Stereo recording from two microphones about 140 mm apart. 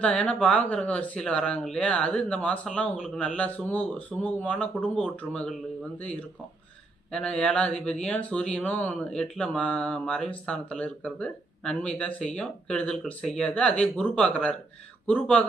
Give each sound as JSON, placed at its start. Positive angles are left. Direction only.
{"t": 0.0, "sound": "speech", "side_deg": 10}